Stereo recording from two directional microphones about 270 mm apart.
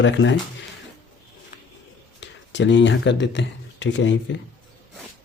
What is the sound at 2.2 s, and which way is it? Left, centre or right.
Speech, left.